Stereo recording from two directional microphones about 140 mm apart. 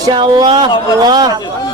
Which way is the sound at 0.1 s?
35° right (ahead or behind).